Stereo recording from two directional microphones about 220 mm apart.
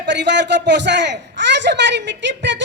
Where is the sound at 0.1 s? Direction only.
55° right (ahead or behind).